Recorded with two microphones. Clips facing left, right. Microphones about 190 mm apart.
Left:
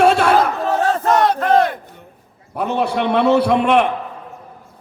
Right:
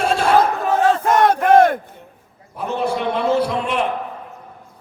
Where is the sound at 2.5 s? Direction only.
65° left (ahead or behind).